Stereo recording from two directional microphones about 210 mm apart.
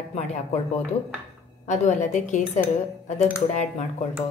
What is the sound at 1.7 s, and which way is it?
A woman's voice, 35° left (ahead or behind).